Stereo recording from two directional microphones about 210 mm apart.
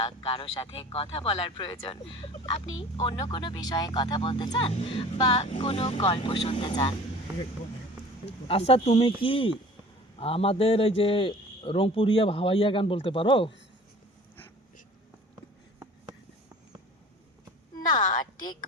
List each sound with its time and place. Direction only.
0.0 s speech: 25° left (ahead or behind)
8.4 s speech: 30° left (ahead or behind)